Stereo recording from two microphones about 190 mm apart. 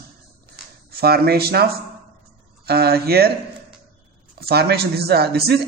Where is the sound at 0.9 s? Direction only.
55° right (ahead or behind).